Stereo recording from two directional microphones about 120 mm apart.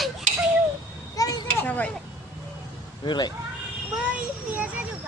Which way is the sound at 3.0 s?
40° left (ahead or behind).